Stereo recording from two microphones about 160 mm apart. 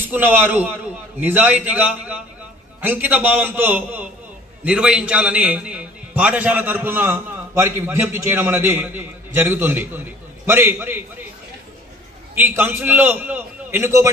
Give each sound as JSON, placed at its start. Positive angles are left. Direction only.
{"t": 0.0, "sound": "a man's voice", "side_deg": -15}
{"t": 12.4, "sound": "a man's voice", "side_deg": -15}